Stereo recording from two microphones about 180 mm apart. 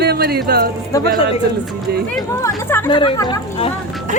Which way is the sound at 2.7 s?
15° left (ahead or behind).